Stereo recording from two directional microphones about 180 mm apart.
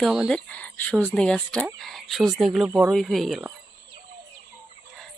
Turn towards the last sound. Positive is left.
turn(degrees=0)  # may be behind; listen again after turning